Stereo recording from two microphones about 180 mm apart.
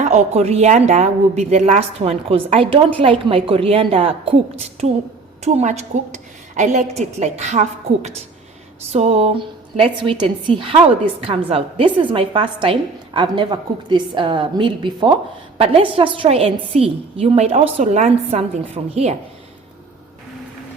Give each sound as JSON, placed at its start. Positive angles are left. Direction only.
{"t": 0.0, "sound": "a woman's voice", "side_deg": -40}